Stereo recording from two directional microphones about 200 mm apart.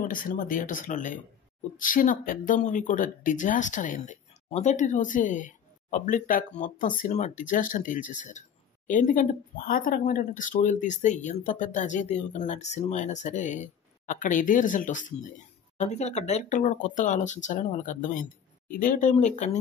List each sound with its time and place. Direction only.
0.0 s speech: 45° left (ahead or behind)